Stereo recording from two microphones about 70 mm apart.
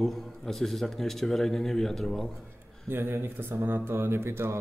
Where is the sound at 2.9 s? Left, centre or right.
Right.